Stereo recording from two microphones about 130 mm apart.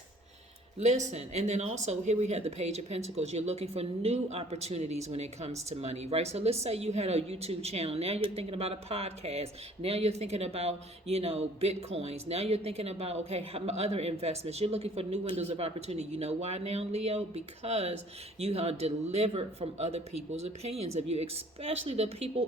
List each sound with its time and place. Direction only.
0.8 s speech: 65° right (ahead or behind)